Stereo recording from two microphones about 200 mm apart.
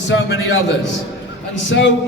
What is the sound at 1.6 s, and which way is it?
Speech, 65° left (ahead or behind).